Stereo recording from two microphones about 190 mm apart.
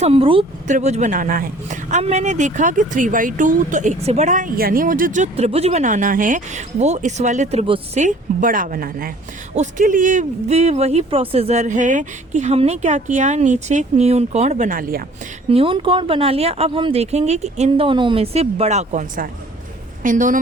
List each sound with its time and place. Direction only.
0.0 s speech: 30° right (ahead or behind); by 15.0 s 50° right (ahead or behind)
15.4 s a woman's voice: 30° right (ahead or behind)